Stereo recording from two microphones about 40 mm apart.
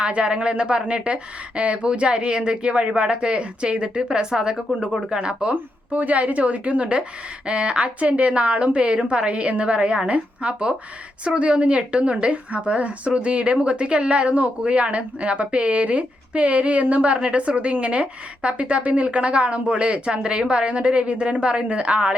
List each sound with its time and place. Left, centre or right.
0.0 s speech: right
5.9 s speech: right